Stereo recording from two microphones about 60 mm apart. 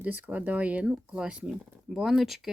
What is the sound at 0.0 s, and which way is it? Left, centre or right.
Speech, right.